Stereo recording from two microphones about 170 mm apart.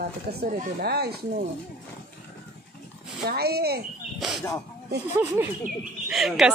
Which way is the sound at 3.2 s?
65° right (ahead or behind).